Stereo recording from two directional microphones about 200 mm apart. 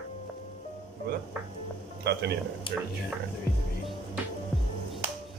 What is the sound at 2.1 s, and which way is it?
Speech, 55° right (ahead or behind).